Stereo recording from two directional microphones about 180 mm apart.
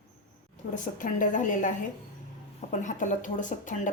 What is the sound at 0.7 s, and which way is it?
A woman's voice, 45° left (ahead or behind).